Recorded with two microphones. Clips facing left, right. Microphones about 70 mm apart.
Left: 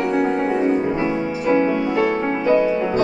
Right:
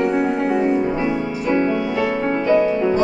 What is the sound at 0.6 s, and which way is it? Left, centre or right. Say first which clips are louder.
Music: even; centre.